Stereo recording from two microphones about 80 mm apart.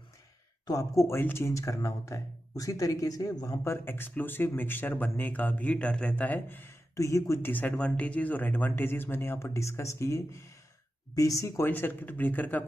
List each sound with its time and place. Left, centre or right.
0.7 s speech: left
3.6 s speech: left
7.0 s speech: left
7.4 s speech: left